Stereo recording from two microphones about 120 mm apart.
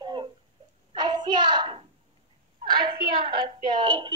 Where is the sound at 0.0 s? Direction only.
40° right (ahead or behind).